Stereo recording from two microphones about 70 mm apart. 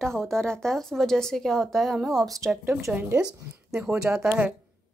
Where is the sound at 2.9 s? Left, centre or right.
Centre.